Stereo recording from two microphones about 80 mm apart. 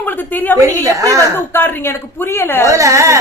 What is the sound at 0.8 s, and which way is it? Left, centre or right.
Speech, right.